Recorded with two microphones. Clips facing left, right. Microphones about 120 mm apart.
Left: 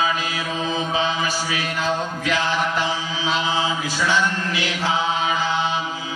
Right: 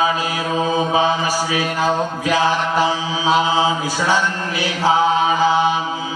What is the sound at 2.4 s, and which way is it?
Mantra, 45° right (ahead or behind).